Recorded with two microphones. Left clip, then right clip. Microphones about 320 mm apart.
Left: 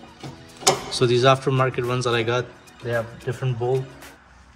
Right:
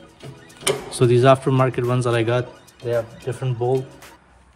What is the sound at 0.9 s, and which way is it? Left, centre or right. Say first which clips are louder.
A man's voice: right 5 dB; right.